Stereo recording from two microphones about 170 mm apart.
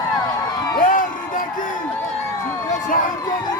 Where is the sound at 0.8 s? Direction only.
50° left (ahead or behind).